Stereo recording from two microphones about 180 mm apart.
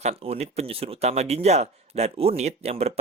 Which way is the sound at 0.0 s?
35° right (ahead or behind).